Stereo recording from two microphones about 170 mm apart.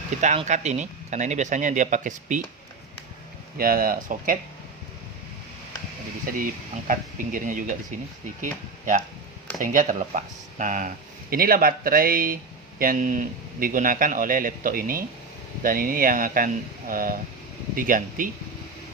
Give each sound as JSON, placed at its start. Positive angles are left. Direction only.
{"t": 0.3, "sound": "speech", "side_deg": -45}
{"t": 3.6, "sound": "speech", "side_deg": -60}
{"t": 6.2, "sound": "speech", "side_deg": -55}